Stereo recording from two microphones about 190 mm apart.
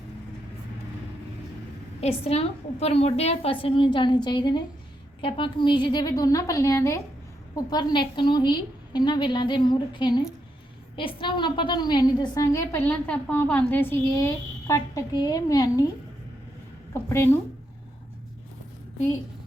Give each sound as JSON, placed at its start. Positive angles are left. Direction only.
{"t": 2.0, "sound": "a woman's voice", "side_deg": 35}
{"t": 16.9, "sound": "a woman's voice", "side_deg": 15}